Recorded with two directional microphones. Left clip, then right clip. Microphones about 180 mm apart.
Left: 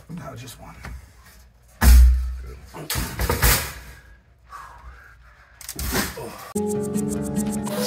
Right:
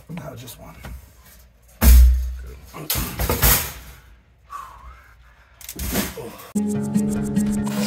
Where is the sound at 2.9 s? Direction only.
45° right (ahead or behind).